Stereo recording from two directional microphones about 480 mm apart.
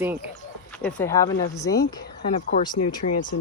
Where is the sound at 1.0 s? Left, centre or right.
Centre.